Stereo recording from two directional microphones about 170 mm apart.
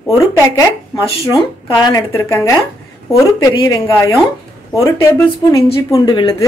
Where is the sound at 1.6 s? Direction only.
20° left (ahead or behind).